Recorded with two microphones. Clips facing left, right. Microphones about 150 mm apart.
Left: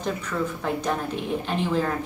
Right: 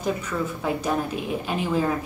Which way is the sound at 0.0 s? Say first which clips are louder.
Right 1 dB; 5° right (ahead or behind).